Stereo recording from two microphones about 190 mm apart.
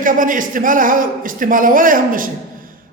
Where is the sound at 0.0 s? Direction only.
45° right (ahead or behind).